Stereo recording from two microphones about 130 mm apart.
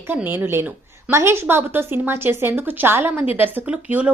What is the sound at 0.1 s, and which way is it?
A woman's voice, 15° right (ahead or behind).